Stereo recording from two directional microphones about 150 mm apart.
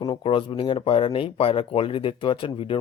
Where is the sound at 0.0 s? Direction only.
35° left (ahead or behind).